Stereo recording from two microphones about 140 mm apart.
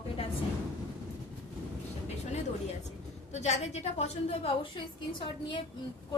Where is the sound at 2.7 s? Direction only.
55° left (ahead or behind).